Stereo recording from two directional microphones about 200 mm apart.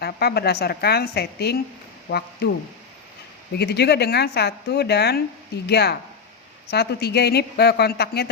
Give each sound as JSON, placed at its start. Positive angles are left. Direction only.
{"t": 0.0, "sound": "speech", "side_deg": 55}
{"t": 3.6, "sound": "speech", "side_deg": 55}